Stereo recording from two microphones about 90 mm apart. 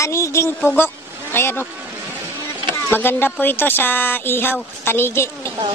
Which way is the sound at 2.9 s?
25° left (ahead or behind).